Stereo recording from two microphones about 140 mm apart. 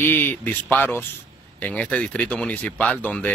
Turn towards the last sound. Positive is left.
turn(degrees=10)  # may be behind; listen again after turning